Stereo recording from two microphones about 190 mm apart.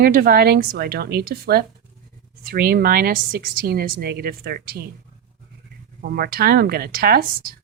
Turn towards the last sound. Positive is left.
turn(degrees=-50)  # may be behind; listen again after turning